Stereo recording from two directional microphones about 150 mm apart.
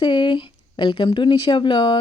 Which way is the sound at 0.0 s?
30° left (ahead or behind).